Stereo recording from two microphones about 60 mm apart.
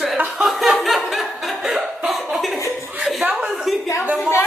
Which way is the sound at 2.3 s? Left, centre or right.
Centre.